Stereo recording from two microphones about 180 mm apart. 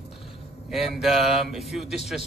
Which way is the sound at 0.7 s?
Centre (ahead or behind).